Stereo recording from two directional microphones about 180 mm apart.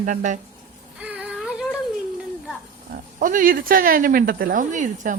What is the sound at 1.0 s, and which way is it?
Child singing, 5° right (ahead or behind).